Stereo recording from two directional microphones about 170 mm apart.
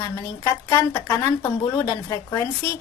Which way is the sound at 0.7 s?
15° left (ahead or behind).